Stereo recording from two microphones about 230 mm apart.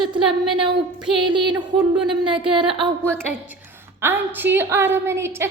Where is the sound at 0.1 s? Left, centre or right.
Right.